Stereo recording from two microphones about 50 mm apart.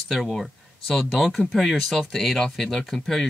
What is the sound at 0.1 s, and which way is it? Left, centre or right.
Speech, centre.